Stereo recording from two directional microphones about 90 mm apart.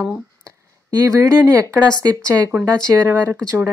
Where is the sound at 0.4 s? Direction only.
40° right (ahead or behind).